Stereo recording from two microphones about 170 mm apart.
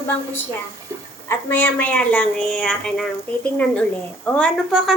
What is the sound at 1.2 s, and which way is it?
A woman's voice, 10° left (ahead or behind).